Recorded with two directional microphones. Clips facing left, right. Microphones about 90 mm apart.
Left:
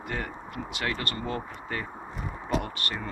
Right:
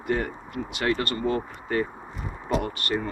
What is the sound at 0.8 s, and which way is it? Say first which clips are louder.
Speech: right 7 dB; 30° right (ahead or behind).